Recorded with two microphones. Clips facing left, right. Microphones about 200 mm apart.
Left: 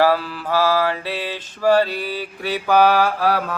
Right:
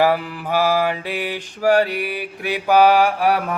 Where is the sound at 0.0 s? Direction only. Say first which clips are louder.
Even; 20° right (ahead or behind).